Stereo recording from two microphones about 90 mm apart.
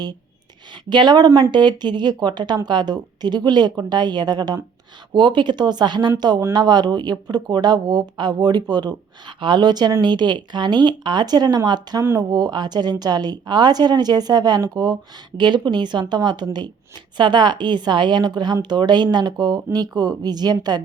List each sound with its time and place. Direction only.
0.9 s a woman's voice: 55° right (ahead or behind)